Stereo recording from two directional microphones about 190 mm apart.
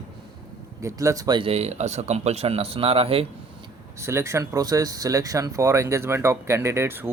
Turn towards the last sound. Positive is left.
turn(degrees=-10)  # may be behind; listen again after turning